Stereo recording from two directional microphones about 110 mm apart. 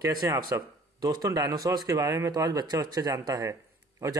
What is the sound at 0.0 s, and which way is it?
Speech, 30° right (ahead or behind).